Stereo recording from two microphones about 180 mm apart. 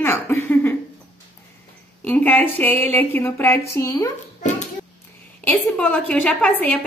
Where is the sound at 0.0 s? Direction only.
10° left (ahead or behind).